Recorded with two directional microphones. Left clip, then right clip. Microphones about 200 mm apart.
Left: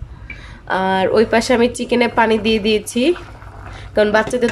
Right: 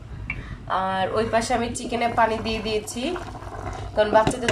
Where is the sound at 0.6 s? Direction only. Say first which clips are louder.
Left 7 dB; 50° left (ahead or behind).